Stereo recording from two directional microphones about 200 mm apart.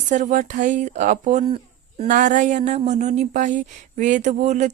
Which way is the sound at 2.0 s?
40° right (ahead or behind).